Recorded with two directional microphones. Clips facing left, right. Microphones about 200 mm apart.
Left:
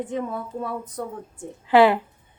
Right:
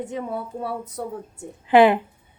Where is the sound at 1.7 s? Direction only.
20° right (ahead or behind).